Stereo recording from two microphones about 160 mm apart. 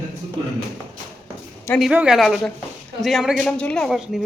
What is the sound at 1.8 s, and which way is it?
Speech, 5° right (ahead or behind).